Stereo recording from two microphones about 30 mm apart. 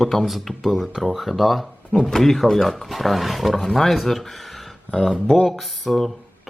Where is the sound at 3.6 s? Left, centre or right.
Centre.